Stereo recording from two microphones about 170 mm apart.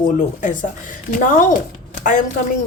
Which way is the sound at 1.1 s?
50° left (ahead or behind).